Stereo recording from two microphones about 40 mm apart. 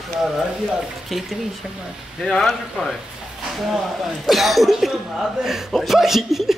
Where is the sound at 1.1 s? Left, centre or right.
Centre.